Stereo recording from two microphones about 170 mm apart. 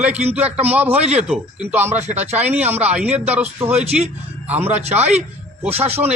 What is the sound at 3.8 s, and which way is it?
Speech, 40° right (ahead or behind).